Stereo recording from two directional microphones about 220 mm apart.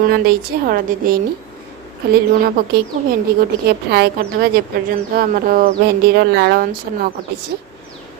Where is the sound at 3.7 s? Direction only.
45° right (ahead or behind).